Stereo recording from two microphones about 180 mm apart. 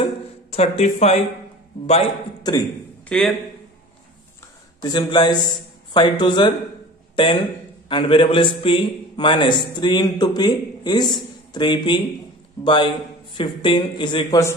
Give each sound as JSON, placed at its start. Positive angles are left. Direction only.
{"t": 0.0, "sound": "a sound", "side_deg": 35}
{"t": 2.4, "sound": "a man's voice", "side_deg": 20}
{"t": 3.1, "sound": "a man's voice", "side_deg": 0}
{"t": 4.8, "sound": "a man's voice", "side_deg": 25}
{"t": 7.9, "sound": "a man's voice", "side_deg": 30}